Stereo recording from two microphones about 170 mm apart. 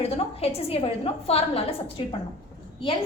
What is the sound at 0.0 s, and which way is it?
A woman's voice, 35° left (ahead or behind).